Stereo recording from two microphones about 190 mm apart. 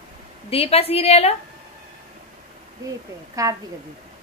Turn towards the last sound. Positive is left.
turn(degrees=-20)  # may be behind; listen again after turning